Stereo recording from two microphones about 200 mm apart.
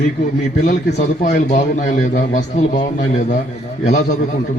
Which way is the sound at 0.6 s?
40° left (ahead or behind).